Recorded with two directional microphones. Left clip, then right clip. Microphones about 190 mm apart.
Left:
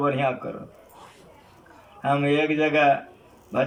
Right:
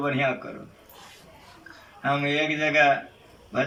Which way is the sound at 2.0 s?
20° left (ahead or behind).